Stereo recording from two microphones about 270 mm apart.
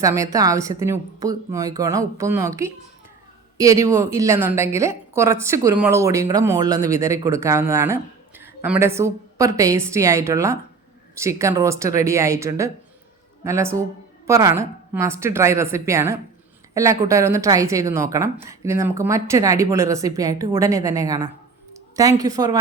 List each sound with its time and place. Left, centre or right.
0.0 s a woman's voice: centre